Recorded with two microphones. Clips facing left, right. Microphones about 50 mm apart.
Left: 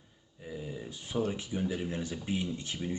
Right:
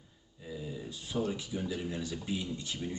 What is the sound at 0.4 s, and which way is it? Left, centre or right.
Speech, left.